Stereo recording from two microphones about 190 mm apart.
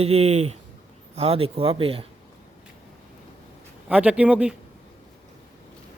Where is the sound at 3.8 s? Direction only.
5° right (ahead or behind).